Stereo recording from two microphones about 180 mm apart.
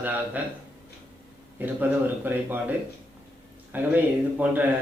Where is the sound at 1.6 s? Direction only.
10° right (ahead or behind).